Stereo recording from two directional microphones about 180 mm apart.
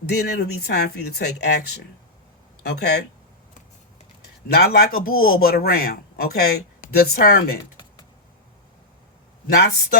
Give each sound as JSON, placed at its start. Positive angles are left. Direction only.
{"t": 0.0, "sound": "speech", "side_deg": 60}
{"t": 4.5, "sound": "speech", "side_deg": 55}
{"t": 9.5, "sound": "speech", "side_deg": 60}